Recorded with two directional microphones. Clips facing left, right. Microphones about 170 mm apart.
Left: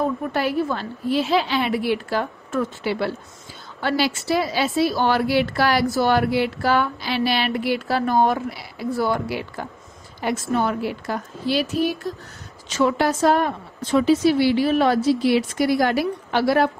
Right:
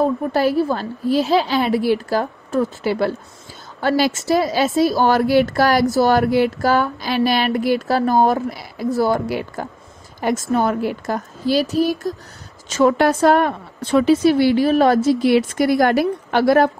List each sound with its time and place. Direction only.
0.0 s a woman's voice: 35° right (ahead or behind)